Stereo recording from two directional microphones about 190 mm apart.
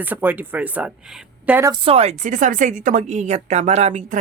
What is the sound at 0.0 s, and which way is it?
Speech, 10° right (ahead or behind).